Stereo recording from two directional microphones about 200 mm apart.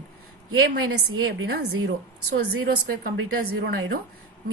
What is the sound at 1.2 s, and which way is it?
Speech, 70° right (ahead or behind).